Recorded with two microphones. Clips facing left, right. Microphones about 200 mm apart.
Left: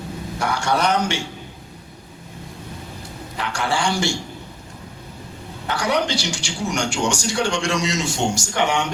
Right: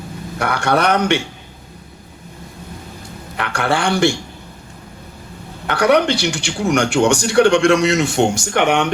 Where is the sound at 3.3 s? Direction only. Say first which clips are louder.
Right 4 dB; 60° right (ahead or behind).